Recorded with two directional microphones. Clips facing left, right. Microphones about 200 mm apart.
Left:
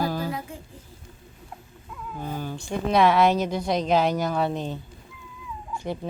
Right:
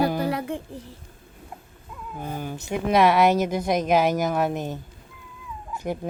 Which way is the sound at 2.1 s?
15° right (ahead or behind).